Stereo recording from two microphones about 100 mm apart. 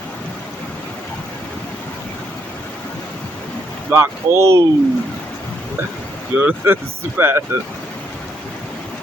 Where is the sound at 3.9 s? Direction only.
30° right (ahead or behind).